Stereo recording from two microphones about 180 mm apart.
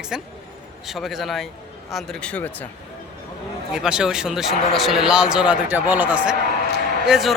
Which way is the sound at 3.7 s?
5° right (ahead or behind).